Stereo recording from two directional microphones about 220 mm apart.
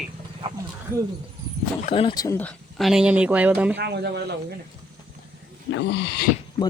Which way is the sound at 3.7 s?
50° right (ahead or behind).